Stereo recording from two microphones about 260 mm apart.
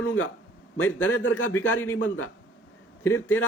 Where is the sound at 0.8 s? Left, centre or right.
Centre.